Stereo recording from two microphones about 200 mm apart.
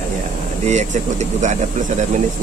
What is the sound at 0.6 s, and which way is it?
Speech, 35° right (ahead or behind).